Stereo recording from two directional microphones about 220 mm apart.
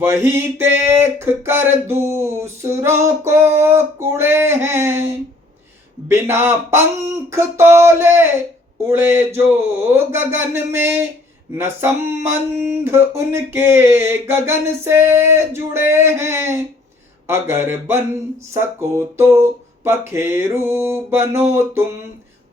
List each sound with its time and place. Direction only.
0.0 s speech: 10° right (ahead or behind)
6.1 s speech: 10° right (ahead or behind)